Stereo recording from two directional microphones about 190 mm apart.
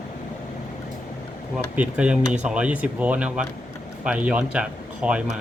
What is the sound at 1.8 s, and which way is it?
Speech, 5° right (ahead or behind).